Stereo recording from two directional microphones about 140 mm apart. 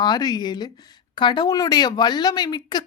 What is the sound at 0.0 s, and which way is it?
Speech, 30° left (ahead or behind).